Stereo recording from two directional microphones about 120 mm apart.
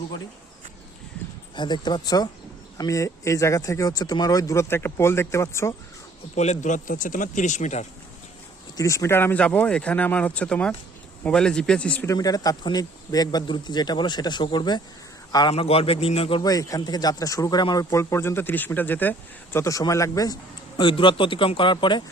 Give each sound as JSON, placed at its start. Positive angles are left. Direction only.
{"t": 1.5, "sound": "speech", "side_deg": 40}
{"t": 6.3, "sound": "speech", "side_deg": 70}
{"t": 8.8, "sound": "speech", "side_deg": 25}
{"t": 12.0, "sound": "a man's voice", "side_deg": 30}
{"t": 15.5, "sound": "a man's voice", "side_deg": 55}
{"t": 16.4, "sound": "speech", "side_deg": 30}
{"t": 17.9, "sound": "speech", "side_deg": 20}
{"t": 19.5, "sound": "speech", "side_deg": 25}